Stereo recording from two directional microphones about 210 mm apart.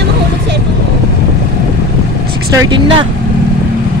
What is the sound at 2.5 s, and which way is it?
Speech, 20° right (ahead or behind).